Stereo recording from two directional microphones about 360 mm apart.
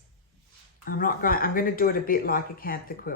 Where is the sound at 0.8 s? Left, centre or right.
Left.